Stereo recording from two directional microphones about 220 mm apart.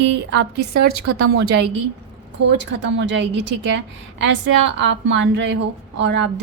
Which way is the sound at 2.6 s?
55° right (ahead or behind).